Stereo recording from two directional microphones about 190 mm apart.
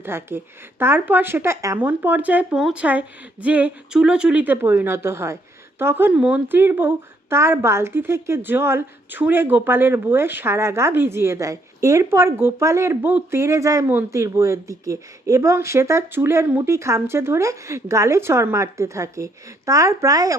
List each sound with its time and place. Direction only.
0.0 s speech: 10° right (ahead or behind)